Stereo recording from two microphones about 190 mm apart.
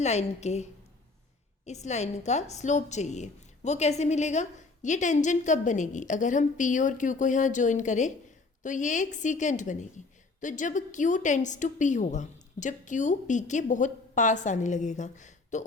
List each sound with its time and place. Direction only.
0.0 s a woman's voice: 35° left (ahead or behind)